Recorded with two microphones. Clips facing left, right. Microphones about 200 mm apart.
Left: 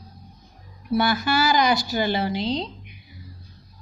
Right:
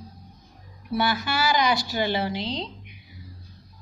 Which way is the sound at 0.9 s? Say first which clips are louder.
Left 4 dB; 40° left (ahead or behind).